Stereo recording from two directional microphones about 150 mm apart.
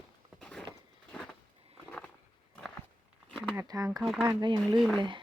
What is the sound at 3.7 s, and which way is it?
Speech, 25° right (ahead or behind).